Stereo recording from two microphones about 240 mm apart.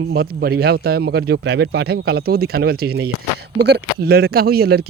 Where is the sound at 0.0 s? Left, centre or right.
Right.